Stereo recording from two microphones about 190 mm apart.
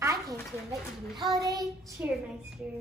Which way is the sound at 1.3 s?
20° right (ahead or behind).